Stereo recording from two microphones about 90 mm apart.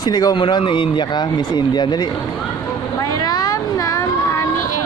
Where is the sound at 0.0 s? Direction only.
50° left (ahead or behind).